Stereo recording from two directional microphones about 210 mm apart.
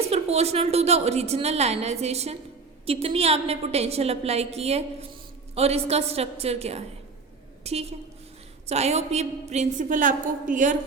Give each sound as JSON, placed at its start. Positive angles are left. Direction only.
{"t": 0.1, "sound": "a woman's voice", "side_deg": -30}